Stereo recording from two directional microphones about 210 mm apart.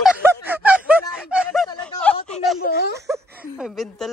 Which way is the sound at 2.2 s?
Centre (ahead or behind).